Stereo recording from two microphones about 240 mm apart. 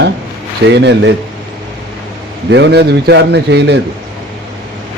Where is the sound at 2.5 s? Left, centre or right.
Right.